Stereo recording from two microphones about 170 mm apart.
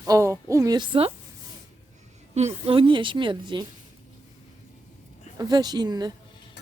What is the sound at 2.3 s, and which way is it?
A woman's voice, 35° right (ahead or behind).